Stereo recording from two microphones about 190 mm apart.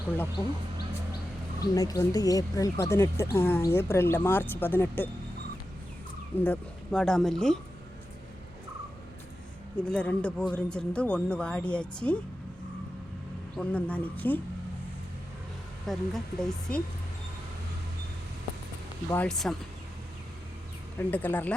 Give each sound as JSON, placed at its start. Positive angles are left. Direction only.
{"t": 1.7, "sound": "speech", "side_deg": 20}
{"t": 6.4, "sound": "speech", "side_deg": 5}
{"t": 9.7, "sound": "speech", "side_deg": 5}
{"t": 13.6, "sound": "speech", "side_deg": 5}
{"t": 15.9, "sound": "speech", "side_deg": 0}
{"t": 19.1, "sound": "speech", "side_deg": 5}
{"t": 21.1, "sound": "speech", "side_deg": 10}